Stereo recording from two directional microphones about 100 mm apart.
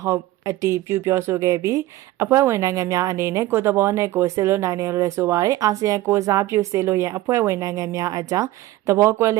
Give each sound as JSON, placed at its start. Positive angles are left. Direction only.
{"t": 0.0, "sound": "speech", "side_deg": -30}